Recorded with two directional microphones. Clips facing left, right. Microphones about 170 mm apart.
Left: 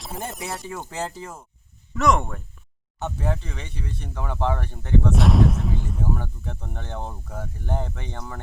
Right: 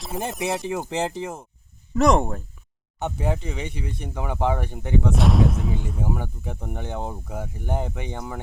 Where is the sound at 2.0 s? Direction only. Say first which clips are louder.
Right 3 dB; 35° right (ahead or behind).